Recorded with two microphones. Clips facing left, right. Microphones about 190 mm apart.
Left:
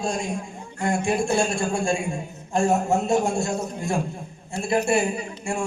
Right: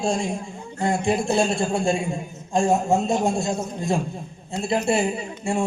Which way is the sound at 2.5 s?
15° right (ahead or behind).